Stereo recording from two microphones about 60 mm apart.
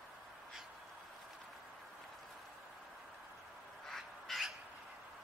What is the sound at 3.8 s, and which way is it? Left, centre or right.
Crow, centre.